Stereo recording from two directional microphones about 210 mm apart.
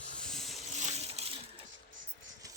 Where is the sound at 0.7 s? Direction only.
35° right (ahead or behind).